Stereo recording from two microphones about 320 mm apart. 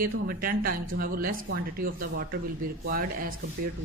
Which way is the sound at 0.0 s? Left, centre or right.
Right.